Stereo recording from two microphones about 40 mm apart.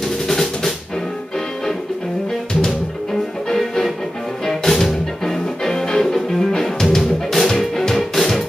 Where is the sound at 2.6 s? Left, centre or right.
Centre.